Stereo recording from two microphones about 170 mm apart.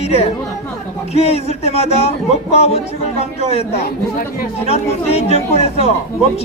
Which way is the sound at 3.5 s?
35° left (ahead or behind).